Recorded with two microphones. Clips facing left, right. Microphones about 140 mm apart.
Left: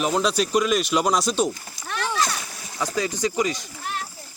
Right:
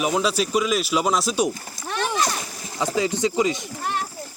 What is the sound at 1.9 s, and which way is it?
Splash, 20° right (ahead or behind).